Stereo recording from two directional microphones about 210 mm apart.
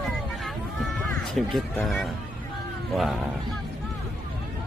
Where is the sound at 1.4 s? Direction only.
Centre (ahead or behind).